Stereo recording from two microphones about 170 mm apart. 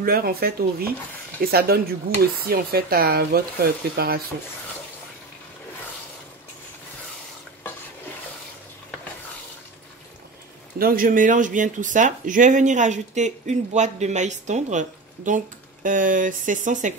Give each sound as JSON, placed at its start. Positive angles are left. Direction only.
{"t": 0.0, "sound": "speech", "side_deg": -60}
{"t": 10.8, "sound": "speech", "side_deg": -55}